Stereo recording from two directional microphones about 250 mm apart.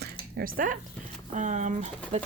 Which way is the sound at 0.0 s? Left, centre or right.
Right.